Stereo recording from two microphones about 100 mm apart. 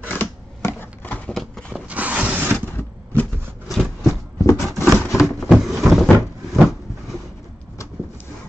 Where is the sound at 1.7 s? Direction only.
15° right (ahead or behind).